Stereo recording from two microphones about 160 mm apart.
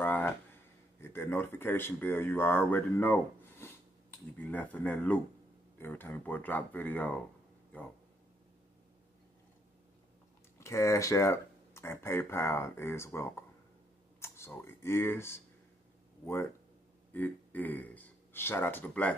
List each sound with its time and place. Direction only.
0.0 s a sound: 10° left (ahead or behind)
1.1 s speech: 15° left (ahead or behind)
10.6 s speech: 20° left (ahead or behind)
17.1 s speech: 10° left (ahead or behind)